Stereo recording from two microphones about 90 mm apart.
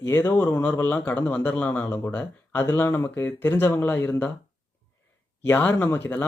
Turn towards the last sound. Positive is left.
turn(degrees=20)  # may be behind; listen again after turning